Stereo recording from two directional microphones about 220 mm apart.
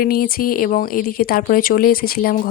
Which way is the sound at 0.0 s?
40° left (ahead or behind).